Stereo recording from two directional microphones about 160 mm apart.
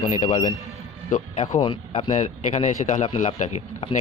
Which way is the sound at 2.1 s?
50° left (ahead or behind).